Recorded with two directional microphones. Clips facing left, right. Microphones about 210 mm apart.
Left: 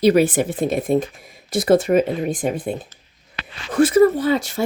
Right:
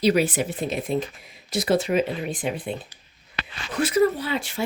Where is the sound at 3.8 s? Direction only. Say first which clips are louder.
Left 7 dB; 50° left (ahead or behind).